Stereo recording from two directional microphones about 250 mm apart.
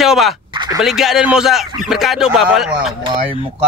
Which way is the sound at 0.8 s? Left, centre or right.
Centre.